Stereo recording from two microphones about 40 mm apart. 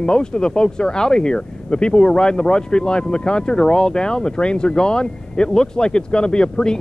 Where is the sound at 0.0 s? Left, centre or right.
Left.